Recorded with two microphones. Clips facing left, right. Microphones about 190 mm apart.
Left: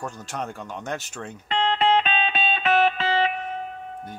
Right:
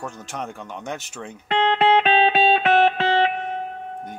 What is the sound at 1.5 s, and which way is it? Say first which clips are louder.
Music: right 3 dB; 65° right (ahead or behind).